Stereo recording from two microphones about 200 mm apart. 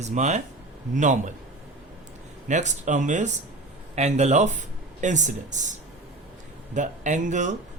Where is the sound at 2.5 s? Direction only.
35° right (ahead or behind).